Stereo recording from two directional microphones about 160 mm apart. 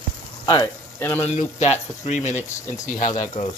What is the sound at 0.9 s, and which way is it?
Speech, 10° left (ahead or behind).